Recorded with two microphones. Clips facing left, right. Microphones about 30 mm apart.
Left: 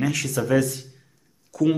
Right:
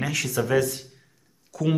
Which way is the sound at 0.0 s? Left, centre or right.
Centre.